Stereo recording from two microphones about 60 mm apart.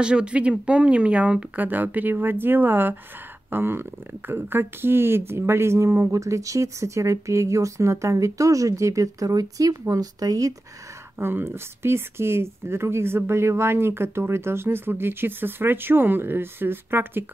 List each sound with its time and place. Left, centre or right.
0.0 s speech: centre; by 10.5 s right
11.1 s speech: right